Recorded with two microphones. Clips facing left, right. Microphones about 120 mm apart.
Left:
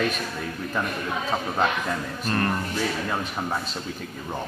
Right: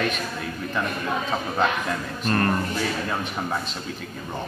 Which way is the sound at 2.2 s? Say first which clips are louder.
Right 3 dB; 10° left (ahead or behind).